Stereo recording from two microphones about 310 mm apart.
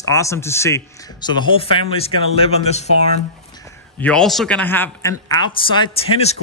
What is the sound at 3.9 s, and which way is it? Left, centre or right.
Speech, centre.